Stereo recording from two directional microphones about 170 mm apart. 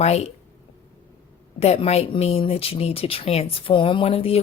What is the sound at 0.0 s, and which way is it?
Speech, 40° left (ahead or behind).